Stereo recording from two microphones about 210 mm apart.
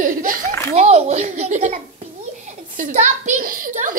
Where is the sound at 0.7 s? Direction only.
30° right (ahead or behind).